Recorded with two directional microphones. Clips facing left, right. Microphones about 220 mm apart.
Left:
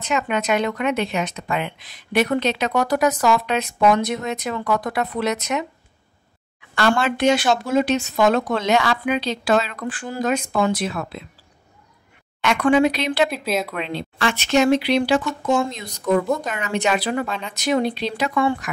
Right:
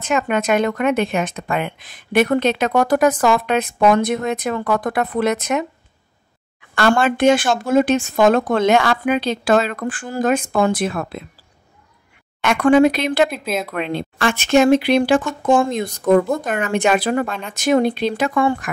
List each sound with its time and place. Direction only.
0.0 s speech: 50° right (ahead or behind)
6.7 s speech: 50° right (ahead or behind)
12.4 s speech: 45° right (ahead or behind)
13.3 s speech: centre (ahead or behind)
13.7 s speech: 50° right (ahead or behind)